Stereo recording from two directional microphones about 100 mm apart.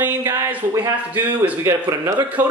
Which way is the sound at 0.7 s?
35° right (ahead or behind).